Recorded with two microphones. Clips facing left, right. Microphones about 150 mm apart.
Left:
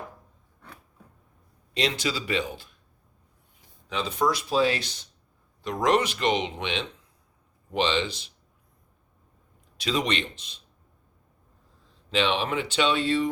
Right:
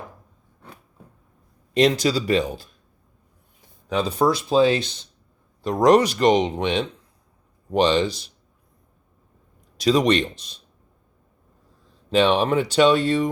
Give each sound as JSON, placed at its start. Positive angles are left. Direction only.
{"t": 1.7, "sound": "speech", "side_deg": -45}
{"t": 3.8, "sound": "speech", "side_deg": -40}
{"t": 5.6, "sound": "speech", "side_deg": -40}
{"t": 9.7, "sound": "speech", "side_deg": -40}
{"t": 12.1, "sound": "speech", "side_deg": -40}